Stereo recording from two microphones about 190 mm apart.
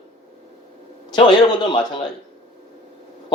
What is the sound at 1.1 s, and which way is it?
Speech, 25° left (ahead or behind).